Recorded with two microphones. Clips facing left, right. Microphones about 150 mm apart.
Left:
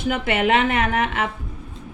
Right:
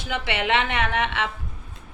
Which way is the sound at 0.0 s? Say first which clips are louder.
Left 6 dB; 45° left (ahead or behind).